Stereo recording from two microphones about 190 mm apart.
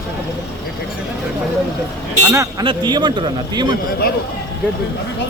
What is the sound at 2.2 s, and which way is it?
Speech, 15° right (ahead or behind).